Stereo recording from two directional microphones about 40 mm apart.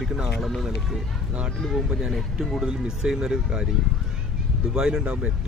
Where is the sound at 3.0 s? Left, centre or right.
Centre.